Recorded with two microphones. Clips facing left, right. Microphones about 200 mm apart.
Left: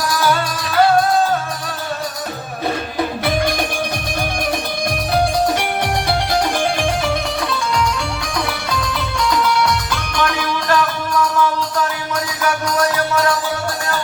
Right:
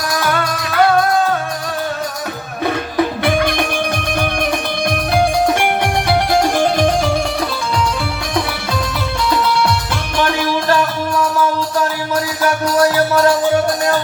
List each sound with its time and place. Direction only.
0.2 s music: 60° right (ahead or behind)
12.8 s music: 30° right (ahead or behind)